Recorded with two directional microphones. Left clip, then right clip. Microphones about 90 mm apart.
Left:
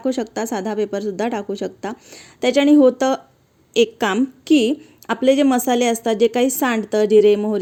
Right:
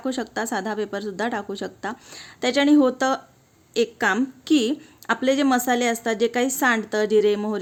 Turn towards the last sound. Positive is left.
turn(degrees=35)  # may be behind; listen again after turning